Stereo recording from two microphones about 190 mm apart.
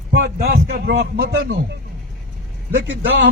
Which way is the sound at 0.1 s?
60° right (ahead or behind).